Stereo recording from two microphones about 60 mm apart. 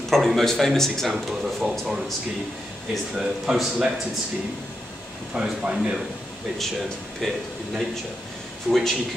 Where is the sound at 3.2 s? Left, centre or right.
Centre.